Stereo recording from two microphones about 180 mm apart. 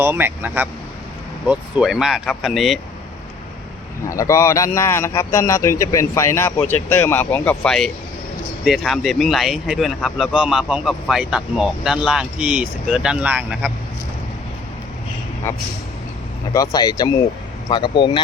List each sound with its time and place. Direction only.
0.0 s speech: 10° right (ahead or behind)
4.0 s speech: 15° left (ahead or behind); by 13.7 s 5° right (ahead or behind)
16.5 s speech: 20° left (ahead or behind)